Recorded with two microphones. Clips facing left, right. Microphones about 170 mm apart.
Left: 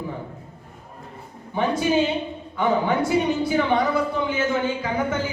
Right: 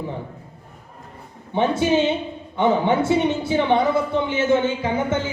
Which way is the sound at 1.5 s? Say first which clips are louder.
Right 2 dB; 25° right (ahead or behind).